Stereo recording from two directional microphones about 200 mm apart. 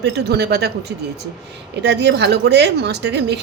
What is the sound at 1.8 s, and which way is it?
A woman's voice, 60° right (ahead or behind).